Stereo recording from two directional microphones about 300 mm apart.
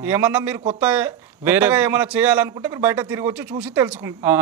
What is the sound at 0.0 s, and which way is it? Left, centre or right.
A man's voice, centre.